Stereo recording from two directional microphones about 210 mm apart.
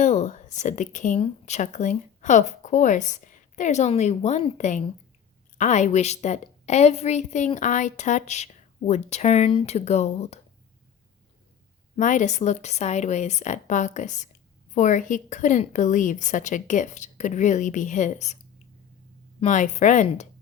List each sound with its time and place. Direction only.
0.0 s a woman's voice: 35° left (ahead or behind)
11.9 s a woman's voice: 35° left (ahead or behind)
19.4 s a woman's voice: 35° left (ahead or behind)